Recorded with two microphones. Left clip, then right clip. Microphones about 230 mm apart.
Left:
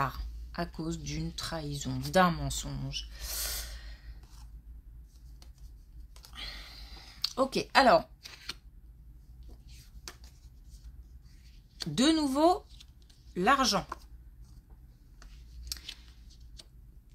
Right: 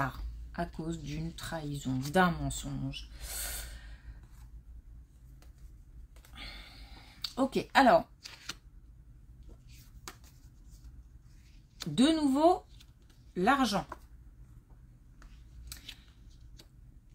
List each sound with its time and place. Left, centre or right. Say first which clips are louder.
0.0 s speech: left 2 dB; left
6.3 s a sound: left 4 dB; left
8.2 s a sound: left 1 dB; centre
9.7 s finger snapping: left 1 dB; centre
11.9 s speech: even; left
15.8 s scissors: left 3 dB; centre